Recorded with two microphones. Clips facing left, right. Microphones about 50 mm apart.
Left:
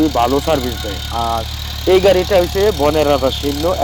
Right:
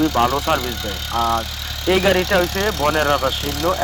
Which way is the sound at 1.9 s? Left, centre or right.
Centre.